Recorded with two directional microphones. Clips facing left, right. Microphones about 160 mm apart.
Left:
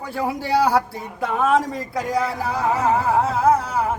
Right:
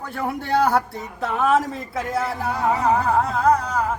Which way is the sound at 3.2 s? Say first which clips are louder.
Left 1 dB; 5° left (ahead or behind).